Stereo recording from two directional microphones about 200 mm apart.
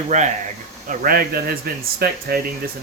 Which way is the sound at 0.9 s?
45° right (ahead or behind).